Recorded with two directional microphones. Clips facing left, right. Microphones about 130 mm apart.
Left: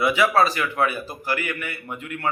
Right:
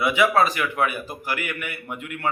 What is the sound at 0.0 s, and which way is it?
A man's voice, 20° right (ahead or behind).